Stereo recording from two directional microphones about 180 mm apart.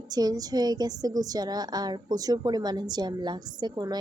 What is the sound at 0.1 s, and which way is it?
A woman's voice, 20° right (ahead or behind).